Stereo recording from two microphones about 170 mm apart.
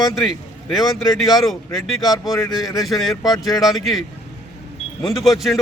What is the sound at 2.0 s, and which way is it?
Speech, 20° left (ahead or behind).